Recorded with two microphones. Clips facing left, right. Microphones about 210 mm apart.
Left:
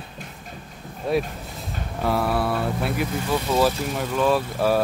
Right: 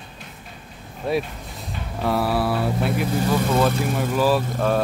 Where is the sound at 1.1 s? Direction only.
Centre (ahead or behind).